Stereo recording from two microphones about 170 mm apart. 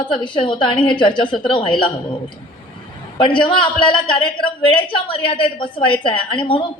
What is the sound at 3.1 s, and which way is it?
A man's voice, 30° left (ahead or behind).